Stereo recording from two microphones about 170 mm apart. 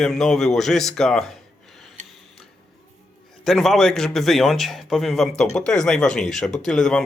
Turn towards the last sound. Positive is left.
turn(degrees=0)  # may be behind; listen again after turning